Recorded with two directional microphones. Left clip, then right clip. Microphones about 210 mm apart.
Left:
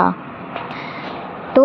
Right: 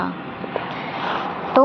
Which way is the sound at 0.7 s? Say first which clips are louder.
Right 2 dB; centre (ahead or behind).